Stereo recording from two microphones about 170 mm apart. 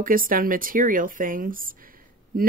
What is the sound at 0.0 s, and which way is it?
Speech, 55° right (ahead or behind).